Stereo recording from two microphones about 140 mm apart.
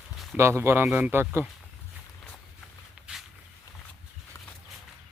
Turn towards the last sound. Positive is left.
turn(degrees=-5)  # may be behind; listen again after turning